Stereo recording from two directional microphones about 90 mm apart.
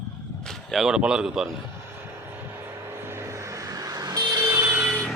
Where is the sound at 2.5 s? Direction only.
25° right (ahead or behind); by 4.5 s 45° right (ahead or behind).